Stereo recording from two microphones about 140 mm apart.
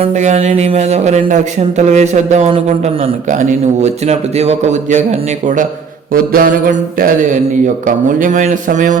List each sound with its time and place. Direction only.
0.0 s a man's voice: 55° right (ahead or behind)
6.3 s mantra: 90° right
7.9 s a man's voice: 65° right (ahead or behind)